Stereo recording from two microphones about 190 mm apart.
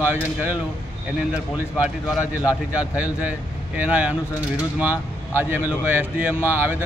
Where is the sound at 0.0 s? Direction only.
10° right (ahead or behind).